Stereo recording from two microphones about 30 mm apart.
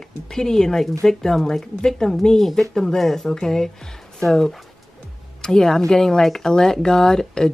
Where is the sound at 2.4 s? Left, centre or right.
Centre.